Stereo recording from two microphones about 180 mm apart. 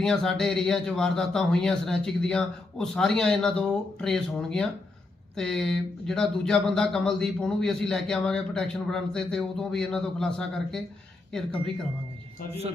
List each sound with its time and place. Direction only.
0.0 s speech: 5° left (ahead or behind)